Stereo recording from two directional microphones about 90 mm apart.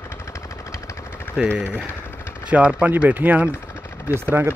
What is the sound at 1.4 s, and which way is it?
Speech, 10° right (ahead or behind).